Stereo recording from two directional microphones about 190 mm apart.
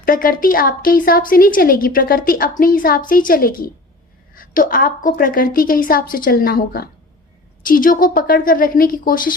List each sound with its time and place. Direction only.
0.0 s a woman's voice: 50° left (ahead or behind)